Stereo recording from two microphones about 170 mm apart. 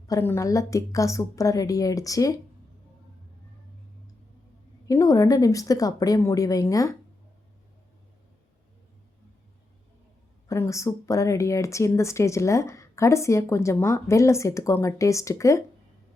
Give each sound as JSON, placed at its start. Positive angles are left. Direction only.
{"t": 0.1, "sound": "a woman's voice", "side_deg": 15}
{"t": 4.9, "sound": "a woman's voice", "side_deg": 20}
{"t": 10.5, "sound": "speech", "side_deg": 15}